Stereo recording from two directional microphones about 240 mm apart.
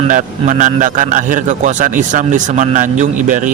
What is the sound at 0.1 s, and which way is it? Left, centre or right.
Speech, right.